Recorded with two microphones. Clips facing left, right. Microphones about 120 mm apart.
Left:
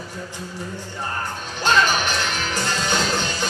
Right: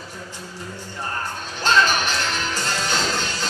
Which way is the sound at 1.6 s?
15° left (ahead or behind).